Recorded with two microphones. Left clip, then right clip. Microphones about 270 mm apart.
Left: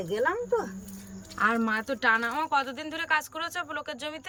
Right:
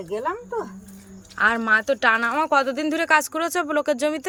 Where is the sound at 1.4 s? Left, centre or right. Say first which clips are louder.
Right 7 dB; centre.